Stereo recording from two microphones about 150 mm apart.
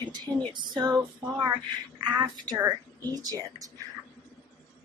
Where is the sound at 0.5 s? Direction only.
30° right (ahead or behind).